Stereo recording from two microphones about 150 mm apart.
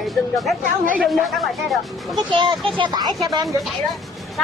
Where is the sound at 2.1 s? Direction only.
30° right (ahead or behind).